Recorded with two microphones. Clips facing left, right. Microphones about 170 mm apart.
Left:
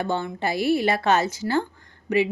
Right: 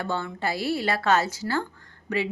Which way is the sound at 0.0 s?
20° left (ahead or behind).